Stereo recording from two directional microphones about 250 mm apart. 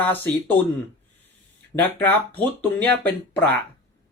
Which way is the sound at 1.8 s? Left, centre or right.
Centre.